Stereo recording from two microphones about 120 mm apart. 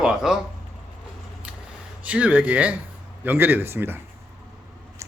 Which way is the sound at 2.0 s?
10° right (ahead or behind).